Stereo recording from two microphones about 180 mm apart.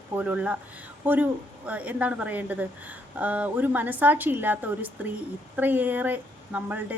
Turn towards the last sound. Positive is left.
turn(degrees=-10)  # may be behind; listen again after turning